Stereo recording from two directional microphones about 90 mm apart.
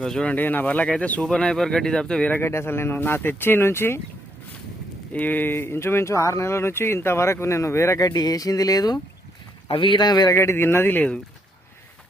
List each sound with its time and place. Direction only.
0.0 s speech: 5° left (ahead or behind)
0.3 s speech: 20° left (ahead or behind)
2.3 s speech: 30° left (ahead or behind)
5.1 s speech: 20° left (ahead or behind); by 9.0 s 45° left (ahead or behind)
9.6 s speech: 70° left (ahead or behind); by 10.3 s 50° left (ahead or behind)
10.3 s speech: 30° left (ahead or behind)